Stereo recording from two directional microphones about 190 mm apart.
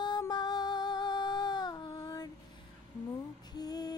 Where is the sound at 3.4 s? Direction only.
20° left (ahead or behind).